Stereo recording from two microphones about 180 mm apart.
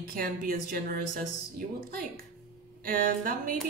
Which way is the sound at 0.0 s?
55° right (ahead or behind).